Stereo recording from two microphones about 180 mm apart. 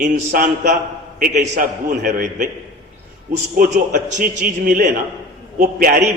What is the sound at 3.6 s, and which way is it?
A man's voice, 45° right (ahead or behind).